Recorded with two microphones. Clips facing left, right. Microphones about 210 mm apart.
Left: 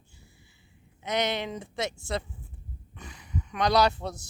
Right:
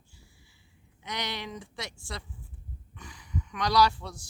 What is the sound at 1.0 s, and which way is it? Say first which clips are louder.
Speech: left 8 dB; 20° left (ahead or behind).